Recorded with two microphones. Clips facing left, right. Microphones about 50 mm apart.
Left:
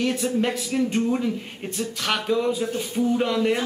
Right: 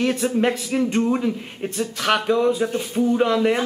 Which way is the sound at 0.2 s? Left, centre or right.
Centre.